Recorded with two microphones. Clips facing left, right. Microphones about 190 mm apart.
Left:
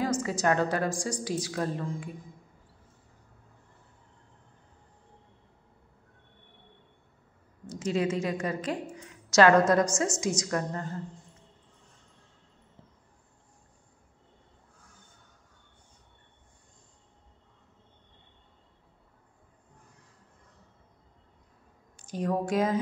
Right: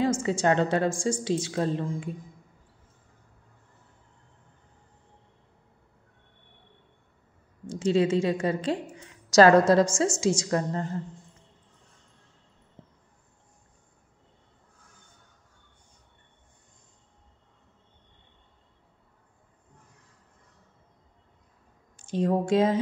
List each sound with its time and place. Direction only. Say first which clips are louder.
0.0 s a woman's voice: right 3 dB; 25° right (ahead or behind)
7.6 s a woman's voice: right 5 dB; 30° right (ahead or behind)
22.0 s a woman's voice: right 4 dB; 25° right (ahead or behind)